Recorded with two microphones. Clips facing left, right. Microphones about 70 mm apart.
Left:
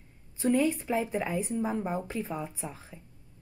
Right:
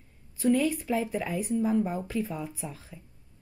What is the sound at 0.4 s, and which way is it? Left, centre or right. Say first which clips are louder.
A woman's voice: right 1 dB; left.